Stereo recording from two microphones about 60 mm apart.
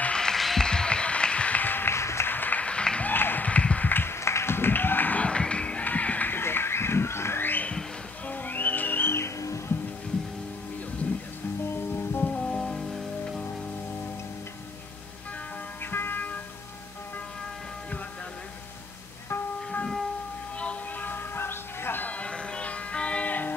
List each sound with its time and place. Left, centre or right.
0.0 s music: centre; by 2.0 s left
2.0 s music: left
2.2 s a sound: left
2.6 s applause: centre
3.1 s a sound: left
8.3 s music: left
9.1 s music: left
11.7 s music: left
12.3 s music: centre
15.8 s music: left
20.5 s music: centre
21.1 s music: left
22.0 s music: left